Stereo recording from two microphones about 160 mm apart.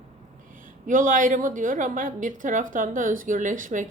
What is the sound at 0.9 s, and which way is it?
A woman's voice, 55° right (ahead or behind).